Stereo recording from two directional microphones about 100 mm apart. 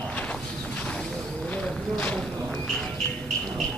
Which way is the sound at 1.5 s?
10° left (ahead or behind).